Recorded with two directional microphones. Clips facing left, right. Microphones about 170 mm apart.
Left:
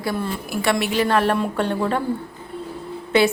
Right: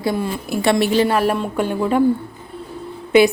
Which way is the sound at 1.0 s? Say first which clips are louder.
Right 1 dB; 5° right (ahead or behind).